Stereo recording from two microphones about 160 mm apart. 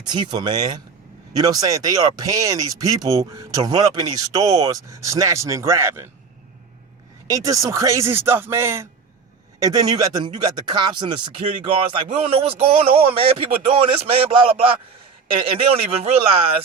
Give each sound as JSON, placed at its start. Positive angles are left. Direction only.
{"t": 0.0, "sound": "speech", "side_deg": -25}
{"t": 7.3, "sound": "speech", "side_deg": -20}